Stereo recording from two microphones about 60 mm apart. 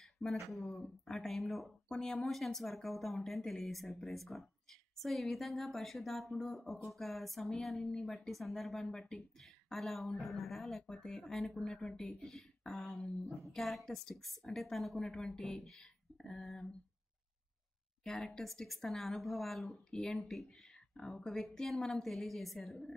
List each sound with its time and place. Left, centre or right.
0.2 s speech: centre
1.9 s speech: centre
2.2 s speech: centre
8.3 s speech: centre
13.4 s speech: centre
18.0 s speech: centre